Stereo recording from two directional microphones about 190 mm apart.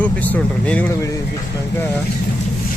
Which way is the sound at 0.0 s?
10° left (ahead or behind).